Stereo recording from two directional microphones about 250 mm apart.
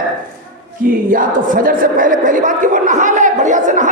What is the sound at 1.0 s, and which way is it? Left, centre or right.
Speech, right.